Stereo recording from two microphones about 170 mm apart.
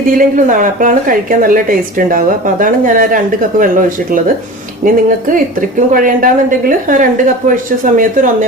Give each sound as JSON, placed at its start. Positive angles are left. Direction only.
{"t": 0.2, "sound": "a woman's voice", "side_deg": -50}